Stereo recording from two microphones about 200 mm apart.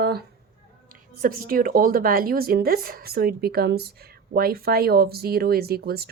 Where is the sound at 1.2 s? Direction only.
45° right (ahead or behind).